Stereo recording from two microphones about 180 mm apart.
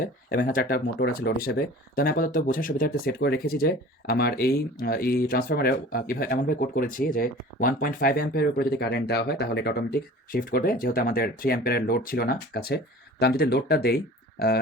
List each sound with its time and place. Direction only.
0.4 s speech: 55° left (ahead or behind)